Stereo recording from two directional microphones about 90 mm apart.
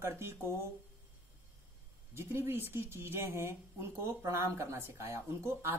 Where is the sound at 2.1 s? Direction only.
25° right (ahead or behind).